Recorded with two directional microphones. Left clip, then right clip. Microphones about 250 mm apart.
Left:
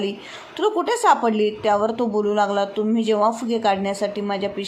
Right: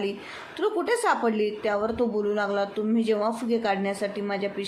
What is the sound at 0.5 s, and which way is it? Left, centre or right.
A woman's voice, centre.